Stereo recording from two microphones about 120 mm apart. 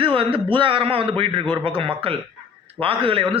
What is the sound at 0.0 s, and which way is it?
A man's voice, 50° right (ahead or behind).